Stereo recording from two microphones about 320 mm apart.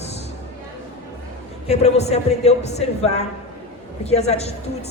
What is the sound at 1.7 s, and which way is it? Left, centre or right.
Speech, centre.